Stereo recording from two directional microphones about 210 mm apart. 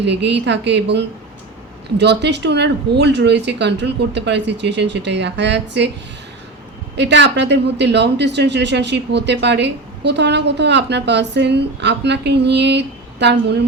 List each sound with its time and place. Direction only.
0.0 s speech: 55° right (ahead or behind)
6.9 s speech: 55° right (ahead or behind)